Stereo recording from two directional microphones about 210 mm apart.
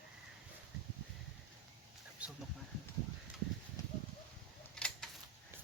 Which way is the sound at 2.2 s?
5° right (ahead or behind).